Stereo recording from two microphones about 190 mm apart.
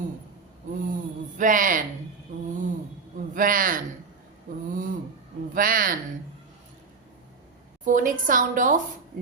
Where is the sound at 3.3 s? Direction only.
45° right (ahead or behind).